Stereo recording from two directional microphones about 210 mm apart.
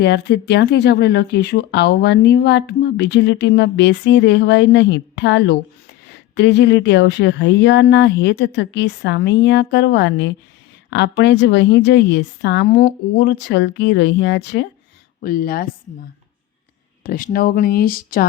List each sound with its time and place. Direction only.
0.0 s a woman's voice: 55° left (ahead or behind)
15.2 s speech: 45° left (ahead or behind)
17.0 s speech: 45° left (ahead or behind)